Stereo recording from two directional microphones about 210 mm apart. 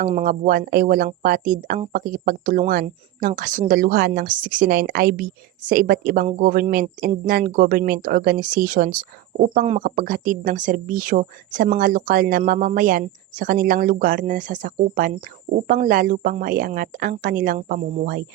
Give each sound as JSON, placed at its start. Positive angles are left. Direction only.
{"t": 0.0, "sound": "speech", "side_deg": -40}
{"t": 18.0, "sound": "speech", "side_deg": -45}